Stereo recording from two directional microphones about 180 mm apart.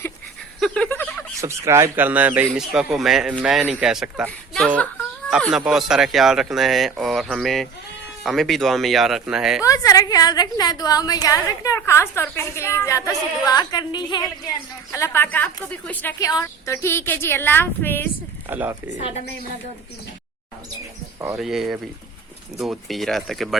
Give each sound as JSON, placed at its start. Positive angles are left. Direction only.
{"t": 0.6, "sound": "a sound", "side_deg": 5}
{"t": 1.4, "sound": "speech", "side_deg": -15}
{"t": 9.6, "sound": "a woman's voice", "side_deg": 20}
{"t": 18.4, "sound": "speech", "side_deg": -10}
{"t": 21.3, "sound": "speech", "side_deg": 0}